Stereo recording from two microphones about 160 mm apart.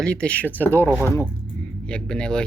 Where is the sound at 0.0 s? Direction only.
5° left (ahead or behind).